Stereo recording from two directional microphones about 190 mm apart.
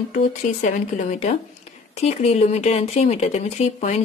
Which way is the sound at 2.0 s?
35° left (ahead or behind).